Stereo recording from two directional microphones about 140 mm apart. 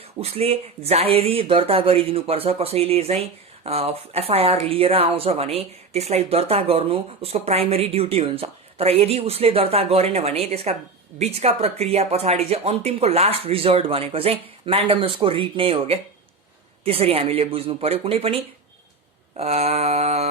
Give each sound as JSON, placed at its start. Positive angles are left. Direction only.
{"t": 0.2, "sound": "speech", "side_deg": -45}